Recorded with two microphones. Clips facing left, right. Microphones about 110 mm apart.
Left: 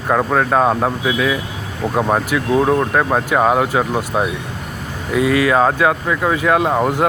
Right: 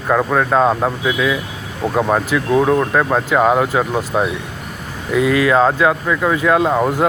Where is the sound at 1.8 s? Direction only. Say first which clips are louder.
Right 1 dB; 20° right (ahead or behind).